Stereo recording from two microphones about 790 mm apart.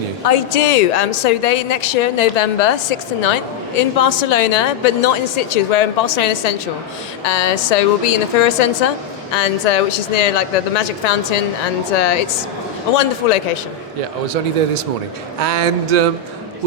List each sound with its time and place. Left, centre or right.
0.3 s a woman's voice: left
13.2 s speech: left
15.4 s a sound: right